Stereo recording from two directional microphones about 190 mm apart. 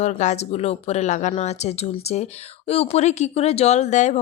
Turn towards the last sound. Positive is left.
turn(degrees=40)  # may be behind; listen again after turning